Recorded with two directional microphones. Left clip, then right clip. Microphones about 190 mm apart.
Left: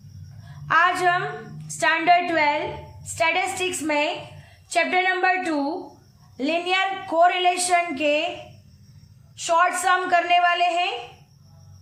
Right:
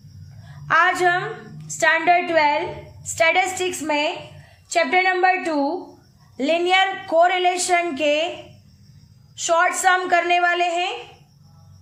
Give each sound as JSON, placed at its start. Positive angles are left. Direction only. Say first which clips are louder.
{"t": 0.7, "sound": "a woman's voice", "louder": "right 2 dB", "side_deg": -20}
{"t": 1.6, "sound": "music", "louder": "right 2 dB", "side_deg": -20}
{"t": 3.2, "sound": "a woman's voice", "louder": "right 4 dB", "side_deg": -25}
{"t": 4.7, "sound": "music", "louder": "right 3 dB", "side_deg": -15}
{"t": 6.3, "sound": "a woman's voice", "louder": "right 5 dB", "side_deg": -25}
{"t": 9.3, "sound": "a woman's voice", "louder": "right 1 dB", "side_deg": -20}